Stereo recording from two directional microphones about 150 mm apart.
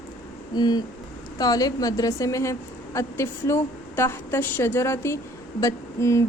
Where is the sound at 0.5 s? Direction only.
25° left (ahead or behind).